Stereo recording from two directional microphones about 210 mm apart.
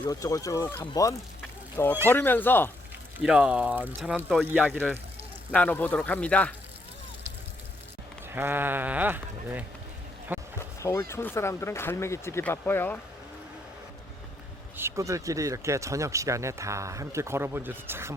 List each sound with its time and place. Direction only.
0.0 s speech: 15° left (ahead or behind)
3.2 s speech: 5° right (ahead or behind)
5.5 s speech: 5° left (ahead or behind)
8.3 s speech: 10° right (ahead or behind)
10.6 s speech: 15° left (ahead or behind)
14.8 s speech: 15° right (ahead or behind)